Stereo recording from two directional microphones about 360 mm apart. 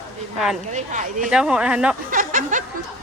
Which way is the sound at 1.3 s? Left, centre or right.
Centre.